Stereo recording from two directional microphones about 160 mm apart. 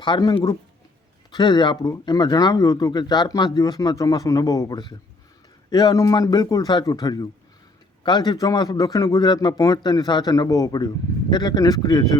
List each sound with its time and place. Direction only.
0.0 s a man's voice: 25° left (ahead or behind)